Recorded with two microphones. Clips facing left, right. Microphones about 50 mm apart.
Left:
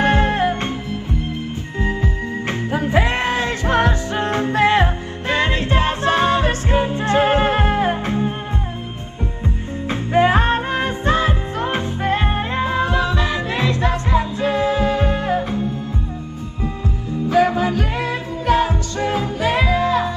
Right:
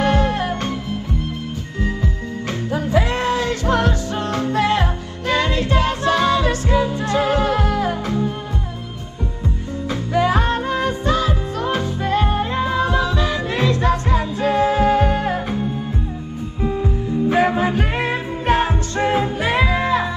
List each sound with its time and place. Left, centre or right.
0.0 s music: left
1.8 s music: left
9.8 s music: left
14.6 s music: right
15.0 s music: left
15.2 s music: centre
17.3 s music: right